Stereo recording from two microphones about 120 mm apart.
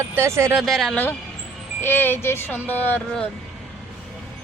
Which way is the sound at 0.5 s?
Centre (ahead or behind).